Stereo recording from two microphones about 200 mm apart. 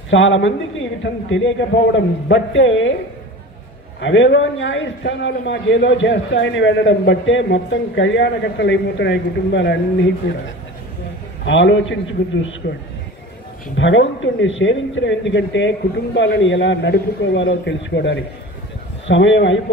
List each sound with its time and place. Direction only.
0.1 s speech: 70° left (ahead or behind)
4.0 s a man's voice: 65° left (ahead or behind)
11.4 s a man's voice: 65° left (ahead or behind)